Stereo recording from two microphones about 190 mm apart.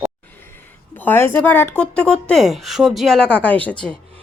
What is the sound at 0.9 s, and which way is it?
Speech, 10° left (ahead or behind).